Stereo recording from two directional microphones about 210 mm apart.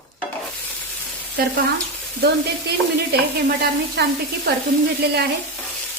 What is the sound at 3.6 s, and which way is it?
Speech, 50° right (ahead or behind).